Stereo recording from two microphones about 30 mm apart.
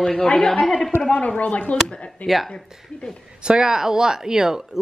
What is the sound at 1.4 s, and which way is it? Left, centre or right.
Speech, left.